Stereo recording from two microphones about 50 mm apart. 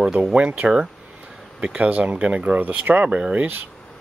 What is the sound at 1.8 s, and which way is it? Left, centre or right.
Speech, right.